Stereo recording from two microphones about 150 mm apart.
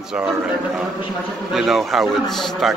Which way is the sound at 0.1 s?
5° right (ahead or behind).